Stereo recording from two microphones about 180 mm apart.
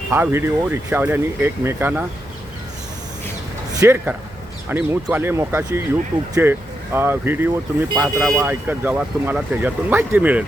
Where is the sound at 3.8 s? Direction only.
15° right (ahead or behind).